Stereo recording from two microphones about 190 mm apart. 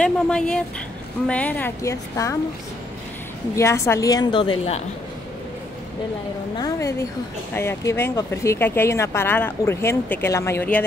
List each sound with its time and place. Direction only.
0.0 s speech: 5° left (ahead or behind)
3.5 s a woman's voice: 15° left (ahead or behind)
6.6 s speech: 15° left (ahead or behind)